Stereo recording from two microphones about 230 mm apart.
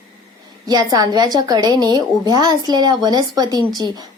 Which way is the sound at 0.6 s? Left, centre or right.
Centre.